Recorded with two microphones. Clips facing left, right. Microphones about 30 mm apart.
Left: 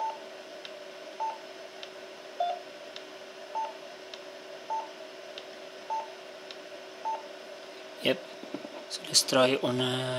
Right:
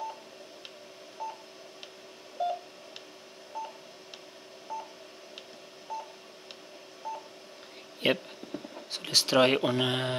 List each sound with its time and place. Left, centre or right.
1.2 s telephone dialing: centre
2.4 s telephone dialing: centre
5.9 s telephone dialing: centre
8.0 s speech: centre